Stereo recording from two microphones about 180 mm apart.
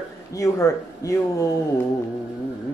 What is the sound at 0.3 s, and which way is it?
Speech, 20° left (ahead or behind).